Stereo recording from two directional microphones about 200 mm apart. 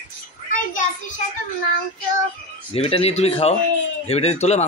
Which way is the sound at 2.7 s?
30° left (ahead or behind).